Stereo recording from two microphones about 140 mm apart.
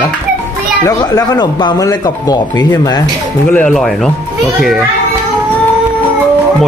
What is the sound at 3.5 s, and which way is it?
Speech, 5° left (ahead or behind).